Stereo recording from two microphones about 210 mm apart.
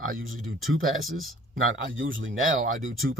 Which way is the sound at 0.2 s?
75° right (ahead or behind).